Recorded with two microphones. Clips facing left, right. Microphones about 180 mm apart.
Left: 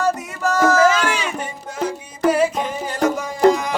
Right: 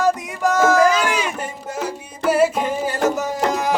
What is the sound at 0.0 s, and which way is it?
Music, 15° right (ahead or behind).